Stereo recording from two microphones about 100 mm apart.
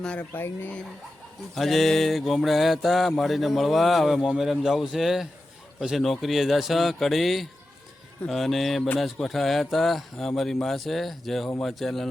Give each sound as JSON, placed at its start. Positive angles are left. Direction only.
{"t": 0.0, "sound": "speech", "side_deg": 10}
{"t": 1.5, "sound": "mantra", "side_deg": 0}